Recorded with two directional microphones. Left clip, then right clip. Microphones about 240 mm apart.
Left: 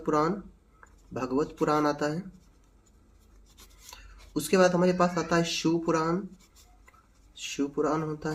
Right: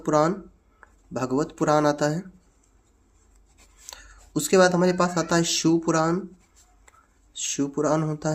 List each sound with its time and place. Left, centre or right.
0.0 s speech: right
3.8 s speech: right
7.3 s speech: right